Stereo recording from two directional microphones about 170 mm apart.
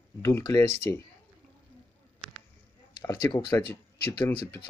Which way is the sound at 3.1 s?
20° left (ahead or behind).